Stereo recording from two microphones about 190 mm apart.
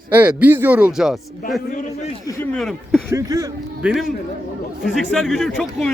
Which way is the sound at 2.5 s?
5° left (ahead or behind).